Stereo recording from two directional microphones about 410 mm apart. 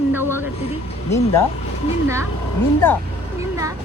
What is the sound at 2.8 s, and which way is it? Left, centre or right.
Speech, centre.